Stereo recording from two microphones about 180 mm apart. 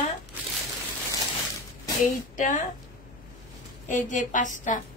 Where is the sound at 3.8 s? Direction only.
45° left (ahead or behind).